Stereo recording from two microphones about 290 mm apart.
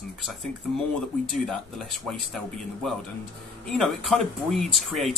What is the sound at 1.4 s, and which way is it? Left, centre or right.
Speech, centre.